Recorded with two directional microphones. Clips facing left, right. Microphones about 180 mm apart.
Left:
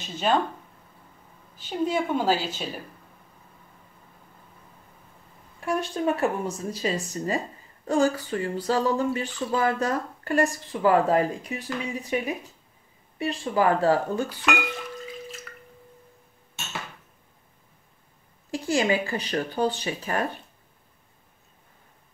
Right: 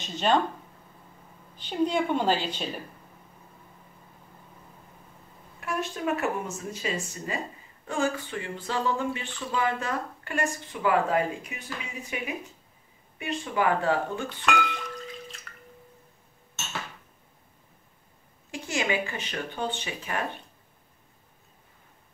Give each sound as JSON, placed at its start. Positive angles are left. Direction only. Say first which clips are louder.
{"t": 0.0, "sound": "a woman's voice", "louder": "even", "side_deg": 5}
{"t": 1.6, "sound": "a woman's voice", "louder": "even", "side_deg": 5}
{"t": 5.6, "sound": "speech", "louder": "left 4 dB", "side_deg": 30}
{"t": 13.2, "sound": "speech", "louder": "left 4 dB", "side_deg": 35}
{"t": 15.0, "sound": "drip", "louder": "left 3 dB", "side_deg": 5}
{"t": 18.5, "sound": "speech", "louder": "left 5 dB", "side_deg": 35}